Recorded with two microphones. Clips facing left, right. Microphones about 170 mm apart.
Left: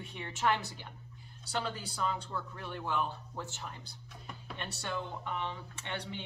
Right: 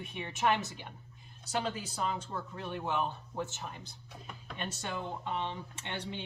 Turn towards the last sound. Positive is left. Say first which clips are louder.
# right 1 dB
turn(degrees=-20)  # may be behind; listen again after turning